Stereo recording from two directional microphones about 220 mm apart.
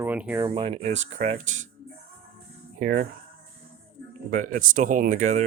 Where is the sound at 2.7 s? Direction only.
40° right (ahead or behind).